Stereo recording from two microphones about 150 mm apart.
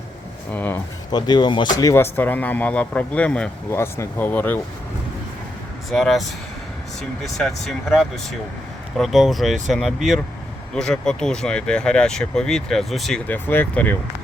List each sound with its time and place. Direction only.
0.5 s a man's voice: 10° left (ahead or behind)
1.1 s speech: 30° left (ahead or behind)
1.8 s a man's voice: 20° left (ahead or behind)
5.9 s speech: centre (ahead or behind)